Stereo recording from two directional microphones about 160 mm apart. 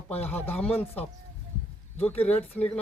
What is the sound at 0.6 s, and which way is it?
Speech, 10° left (ahead or behind).